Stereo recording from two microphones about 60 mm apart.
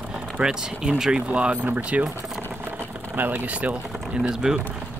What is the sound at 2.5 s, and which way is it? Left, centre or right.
Vehicle, right.